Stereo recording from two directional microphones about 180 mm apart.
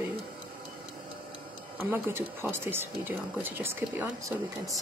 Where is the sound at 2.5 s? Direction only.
15° right (ahead or behind).